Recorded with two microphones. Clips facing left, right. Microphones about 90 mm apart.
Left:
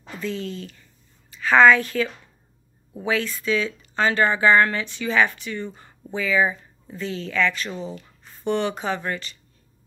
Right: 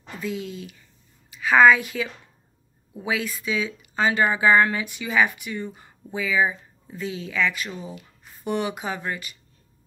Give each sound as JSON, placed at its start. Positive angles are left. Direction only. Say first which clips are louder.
{"t": 0.2, "sound": "a woman's voice", "louder": "left 1 dB", "side_deg": -10}